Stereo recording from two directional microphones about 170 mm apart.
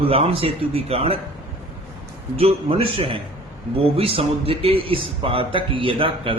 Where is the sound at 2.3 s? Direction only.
35° right (ahead or behind).